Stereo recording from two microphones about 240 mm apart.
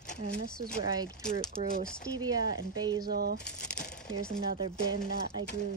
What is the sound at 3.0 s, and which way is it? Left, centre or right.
Speech, right.